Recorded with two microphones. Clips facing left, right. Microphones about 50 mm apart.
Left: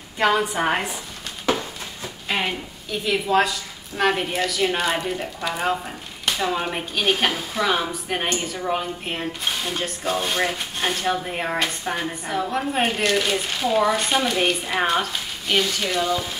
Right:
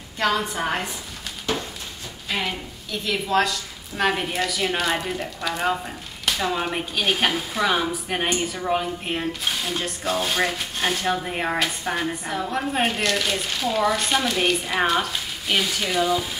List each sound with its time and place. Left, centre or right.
0.4 s a woman's voice: centre
2.2 s a woman's voice: left; by 16.3 s centre